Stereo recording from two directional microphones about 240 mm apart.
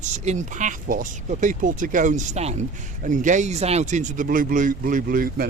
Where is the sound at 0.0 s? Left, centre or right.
Right.